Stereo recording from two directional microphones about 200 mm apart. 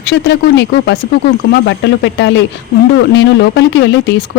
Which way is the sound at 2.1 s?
65° left (ahead or behind).